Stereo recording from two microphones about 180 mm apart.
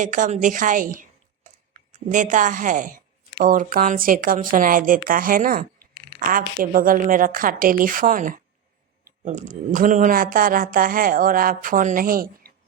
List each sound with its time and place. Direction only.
0.0 s a woman's voice: 45° right (ahead or behind)